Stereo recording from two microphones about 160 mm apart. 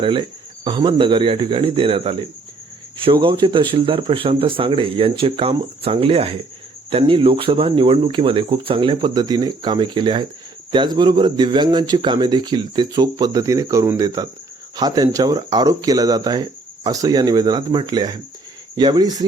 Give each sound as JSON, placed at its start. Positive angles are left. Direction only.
{"t": 0.0, "sound": "speech", "side_deg": -30}